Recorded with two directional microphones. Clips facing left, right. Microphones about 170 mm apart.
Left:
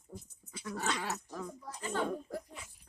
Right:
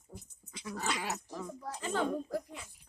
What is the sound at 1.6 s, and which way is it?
Speech, 90° right.